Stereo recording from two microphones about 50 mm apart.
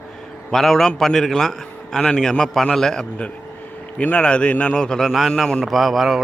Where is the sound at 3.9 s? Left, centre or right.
Left.